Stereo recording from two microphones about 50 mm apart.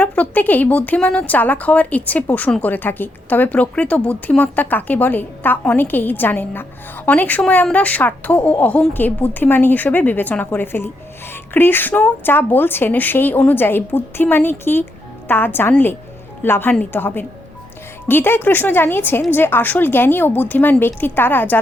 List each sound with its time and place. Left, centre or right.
0.0 s a woman's voice: left